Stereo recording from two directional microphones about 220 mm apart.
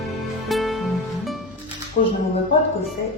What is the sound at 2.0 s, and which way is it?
Music, 30° left (ahead or behind).